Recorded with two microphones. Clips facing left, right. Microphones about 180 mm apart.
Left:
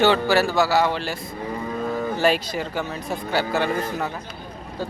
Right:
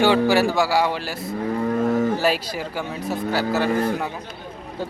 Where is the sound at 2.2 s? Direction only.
5° right (ahead or behind).